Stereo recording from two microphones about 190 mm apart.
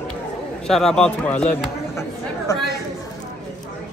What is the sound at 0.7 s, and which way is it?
Speech, centre (ahead or behind).